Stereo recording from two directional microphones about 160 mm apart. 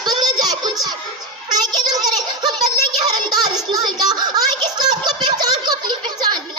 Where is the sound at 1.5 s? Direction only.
25° right (ahead or behind).